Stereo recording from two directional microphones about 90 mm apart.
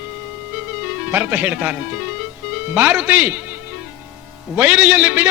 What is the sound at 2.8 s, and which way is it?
Speech, 15° right (ahead or behind).